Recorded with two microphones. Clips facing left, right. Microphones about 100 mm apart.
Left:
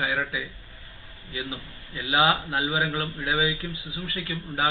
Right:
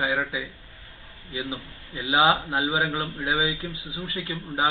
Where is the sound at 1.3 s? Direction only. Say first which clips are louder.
Right 2 dB; 25° right (ahead or behind).